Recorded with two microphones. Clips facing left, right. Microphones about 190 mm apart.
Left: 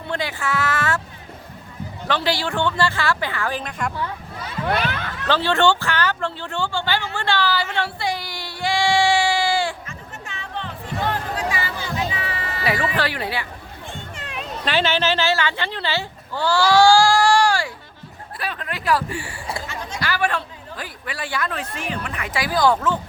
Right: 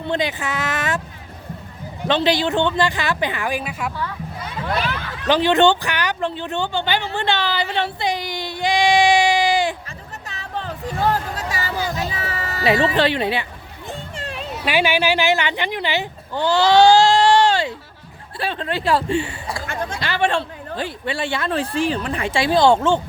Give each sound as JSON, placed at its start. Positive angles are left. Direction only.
{"t": 0.1, "sound": "speech", "side_deg": -20}
{"t": 2.0, "sound": "speech", "side_deg": -20}
{"t": 5.3, "sound": "speech", "side_deg": -15}
{"t": 10.2, "sound": "music", "side_deg": -40}
{"t": 12.1, "sound": "a sound", "side_deg": -40}
{"t": 12.6, "sound": "speech", "side_deg": -25}
{"t": 14.2, "sound": "children playing", "side_deg": -35}
{"t": 14.6, "sound": "speech", "side_deg": -10}
{"t": 19.6, "sound": "a sound", "side_deg": -55}
{"t": 20.0, "sound": "speech", "side_deg": -25}